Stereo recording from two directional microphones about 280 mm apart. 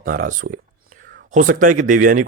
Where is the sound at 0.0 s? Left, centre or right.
Right.